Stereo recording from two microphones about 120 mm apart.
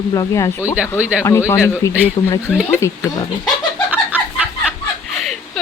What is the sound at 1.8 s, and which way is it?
Speech, 25° left (ahead or behind).